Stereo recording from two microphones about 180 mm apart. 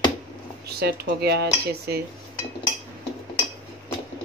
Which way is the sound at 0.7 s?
65° right (ahead or behind).